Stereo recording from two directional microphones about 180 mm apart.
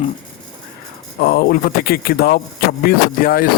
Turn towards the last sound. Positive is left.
turn(degrees=55)  # may be behind; listen again after turning